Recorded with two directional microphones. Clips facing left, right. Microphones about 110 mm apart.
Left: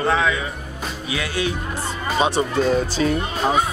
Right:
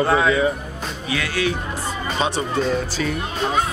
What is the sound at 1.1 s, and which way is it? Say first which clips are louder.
Speech: right 1 dB; 20° left (ahead or behind).